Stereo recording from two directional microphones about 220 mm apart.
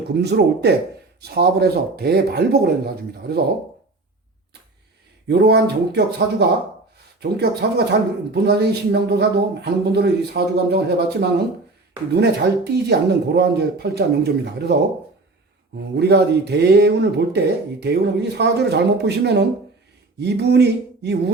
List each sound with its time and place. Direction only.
0.1 s speech: 50° right (ahead or behind)
5.3 s speech: 45° right (ahead or behind)
16.0 s speech: 50° right (ahead or behind)
20.1 s a sound: 50° right (ahead or behind)